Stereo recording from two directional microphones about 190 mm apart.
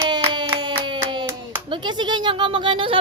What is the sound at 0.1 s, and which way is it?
Hands, 25° right (ahead or behind).